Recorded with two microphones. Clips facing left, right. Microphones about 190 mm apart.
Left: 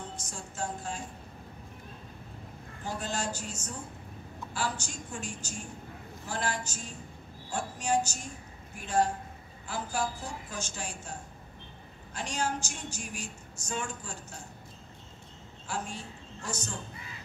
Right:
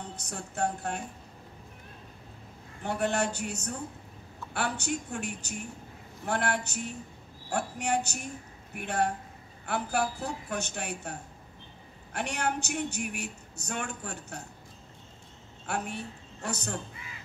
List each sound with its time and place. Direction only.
0.1 s speech: 65° right (ahead or behind)
2.8 s a woman's voice: 65° right (ahead or behind)
15.6 s a woman's voice: 65° right (ahead or behind)